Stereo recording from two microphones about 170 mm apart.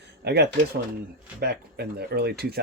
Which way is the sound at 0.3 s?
75° right (ahead or behind).